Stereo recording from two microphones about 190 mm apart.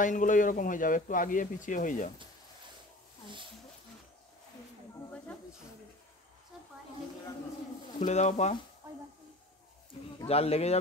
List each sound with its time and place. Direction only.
0.0 s speech: 40° left (ahead or behind)
8.0 s speech: 40° left (ahead or behind)
10.2 s speech: 30° left (ahead or behind)